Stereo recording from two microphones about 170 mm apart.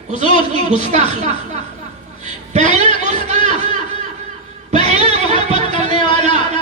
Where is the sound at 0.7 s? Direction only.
45° right (ahead or behind).